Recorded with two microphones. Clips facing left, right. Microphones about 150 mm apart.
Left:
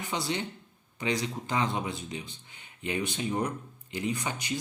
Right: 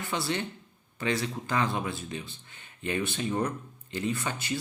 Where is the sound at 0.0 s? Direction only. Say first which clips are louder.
Right 1 dB; 20° left (ahead or behind).